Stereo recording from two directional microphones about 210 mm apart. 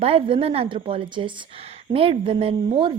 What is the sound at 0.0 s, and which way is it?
A woman's voice, 25° right (ahead or behind).